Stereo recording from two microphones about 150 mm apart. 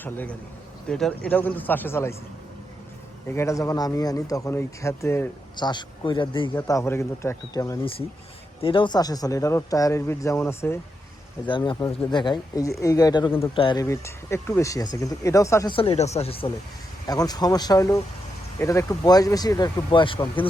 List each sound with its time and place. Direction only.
0.0 s a man's voice: 10° left (ahead or behind)
3.2 s speech: 20° left (ahead or behind)
5.5 s a man's voice: 30° left (ahead or behind)
6.6 s speech: 20° left (ahead or behind)
8.6 s speech: 35° left (ahead or behind); by 10.8 s 15° left (ahead or behind)
11.4 s a man's voice: 30° left (ahead or behind)
13.8 s speech: 20° left (ahead or behind)
15.7 s a man's voice: 40° left (ahead or behind)
17.1 s speech: 25° left (ahead or behind)